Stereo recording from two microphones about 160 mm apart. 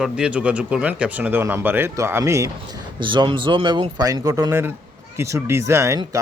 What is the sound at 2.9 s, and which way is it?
A man's voice, 30° right (ahead or behind).